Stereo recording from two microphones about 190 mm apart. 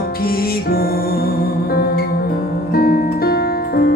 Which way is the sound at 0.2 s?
50° left (ahead or behind).